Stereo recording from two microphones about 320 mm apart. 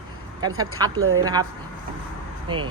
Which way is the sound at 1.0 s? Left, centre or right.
Right.